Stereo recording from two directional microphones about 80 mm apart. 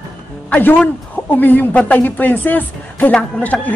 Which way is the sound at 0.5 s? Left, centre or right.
Left.